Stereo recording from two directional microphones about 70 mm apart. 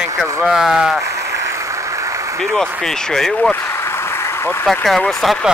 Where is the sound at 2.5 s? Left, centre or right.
Centre.